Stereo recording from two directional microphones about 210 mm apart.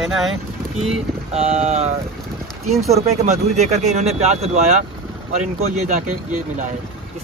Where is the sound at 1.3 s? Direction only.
30° right (ahead or behind).